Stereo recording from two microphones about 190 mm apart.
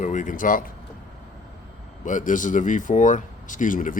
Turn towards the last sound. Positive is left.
turn(degrees=45)  # may be behind; listen again after turning